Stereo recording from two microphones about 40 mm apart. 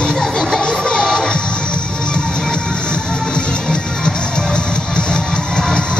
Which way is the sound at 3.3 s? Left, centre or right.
Left.